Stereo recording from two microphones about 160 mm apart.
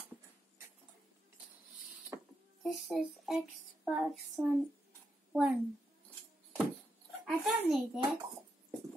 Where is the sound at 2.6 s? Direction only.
Centre (ahead or behind).